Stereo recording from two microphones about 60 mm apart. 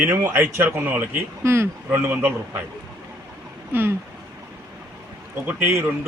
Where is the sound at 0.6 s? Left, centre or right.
Right.